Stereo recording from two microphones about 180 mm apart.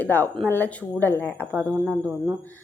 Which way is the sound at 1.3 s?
10° right (ahead or behind).